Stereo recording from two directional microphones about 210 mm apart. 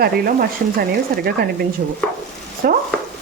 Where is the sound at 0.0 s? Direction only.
45° right (ahead or behind).